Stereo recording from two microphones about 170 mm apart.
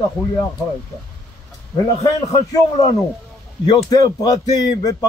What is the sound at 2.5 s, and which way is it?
Speech, 20° left (ahead or behind).